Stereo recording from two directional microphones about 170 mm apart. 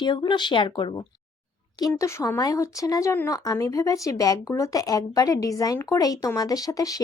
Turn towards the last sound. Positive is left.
turn(degrees=20)  # may be behind; listen again after turning